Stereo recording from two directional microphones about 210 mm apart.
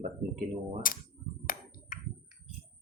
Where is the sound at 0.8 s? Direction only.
40° left (ahead or behind).